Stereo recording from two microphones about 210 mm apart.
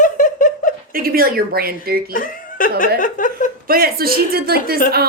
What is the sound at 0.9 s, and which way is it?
A woman's voice, 45° right (ahead or behind).